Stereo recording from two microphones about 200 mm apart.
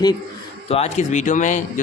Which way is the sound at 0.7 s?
30° left (ahead or behind).